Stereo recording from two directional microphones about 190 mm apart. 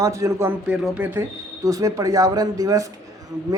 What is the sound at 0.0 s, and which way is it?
A man's voice, 15° right (ahead or behind).